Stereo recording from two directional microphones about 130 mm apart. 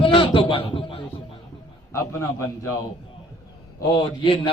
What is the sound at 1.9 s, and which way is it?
Speech, 20° left (ahead or behind).